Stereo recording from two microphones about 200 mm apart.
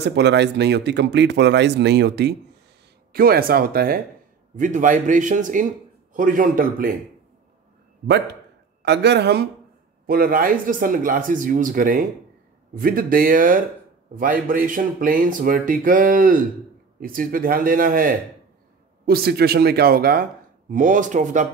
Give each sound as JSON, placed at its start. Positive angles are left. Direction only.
{"t": 0.0, "sound": "a man's voice", "side_deg": -60}
{"t": 8.8, "sound": "a man's voice", "side_deg": -55}